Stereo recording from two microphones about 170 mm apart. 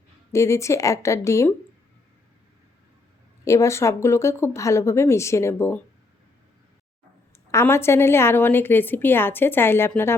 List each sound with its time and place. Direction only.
0.3 s a woman's voice: 15° left (ahead or behind)
3.4 s a woman's voice: 15° left (ahead or behind)
7.5 s a woman's voice: 15° left (ahead or behind)